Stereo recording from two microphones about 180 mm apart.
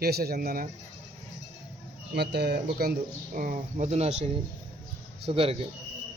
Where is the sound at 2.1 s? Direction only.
65° right (ahead or behind).